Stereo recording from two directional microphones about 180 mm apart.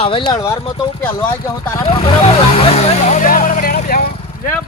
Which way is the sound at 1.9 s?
35° left (ahead or behind).